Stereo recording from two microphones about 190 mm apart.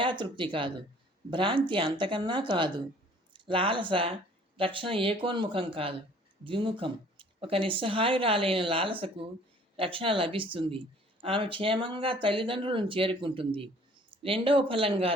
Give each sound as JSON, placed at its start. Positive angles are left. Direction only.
{"t": 0.0, "sound": "speech", "side_deg": -25}